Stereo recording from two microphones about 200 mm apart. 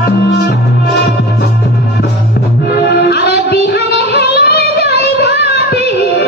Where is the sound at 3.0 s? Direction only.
55° left (ahead or behind).